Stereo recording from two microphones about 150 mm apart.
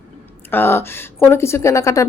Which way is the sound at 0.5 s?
15° left (ahead or behind).